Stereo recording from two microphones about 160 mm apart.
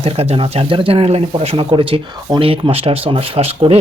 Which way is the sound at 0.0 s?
40° right (ahead or behind).